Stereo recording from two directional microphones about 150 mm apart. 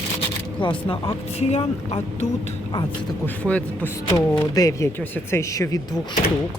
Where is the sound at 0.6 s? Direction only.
35° left (ahead or behind).